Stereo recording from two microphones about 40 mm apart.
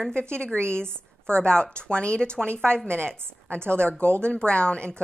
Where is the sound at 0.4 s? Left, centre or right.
Left.